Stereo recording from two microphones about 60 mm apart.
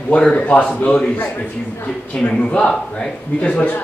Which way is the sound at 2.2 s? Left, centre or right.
Centre.